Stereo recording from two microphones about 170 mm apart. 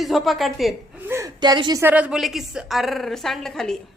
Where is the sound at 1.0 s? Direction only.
15° right (ahead or behind).